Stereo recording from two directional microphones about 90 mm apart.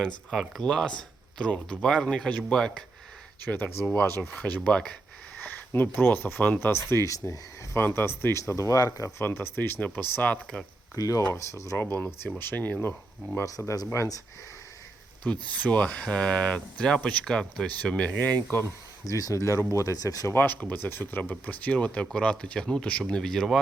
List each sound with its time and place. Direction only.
0.3 s speech: centre (ahead or behind)
3.9 s speech: 25° left (ahead or behind)
4.4 s speech: 15° left (ahead or behind)
5.4 s speech: 20° left (ahead or behind)
10.9 s speech: 40° left (ahead or behind)
11.9 s speech: 20° left (ahead or behind)
13.4 s speech: 35° left (ahead or behind)
15.2 s speech: 15° left (ahead or behind)
18.5 s speech: 35° left (ahead or behind)
20.3 s speech: 20° left (ahead or behind); by 23.6 s 5° left (ahead or behind)